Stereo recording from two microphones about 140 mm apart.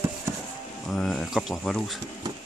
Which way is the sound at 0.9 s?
Centre (ahead or behind).